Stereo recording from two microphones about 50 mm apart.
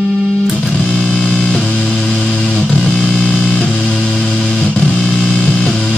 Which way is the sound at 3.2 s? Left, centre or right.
Centre.